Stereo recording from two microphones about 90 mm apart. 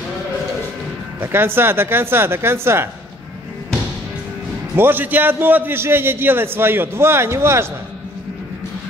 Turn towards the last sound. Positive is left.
turn(degrees=-30)  # may be behind; listen again after turning